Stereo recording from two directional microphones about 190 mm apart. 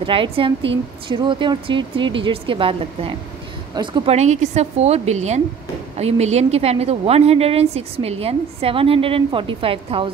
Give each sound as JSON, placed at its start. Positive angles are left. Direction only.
{"t": 0.0, "sound": "a woman's voice", "side_deg": -25}